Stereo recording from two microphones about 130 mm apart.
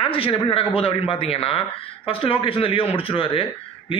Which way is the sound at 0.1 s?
45° left (ahead or behind).